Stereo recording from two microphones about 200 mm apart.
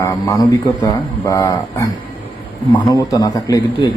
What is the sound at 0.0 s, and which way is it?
Speech, 15° left (ahead or behind).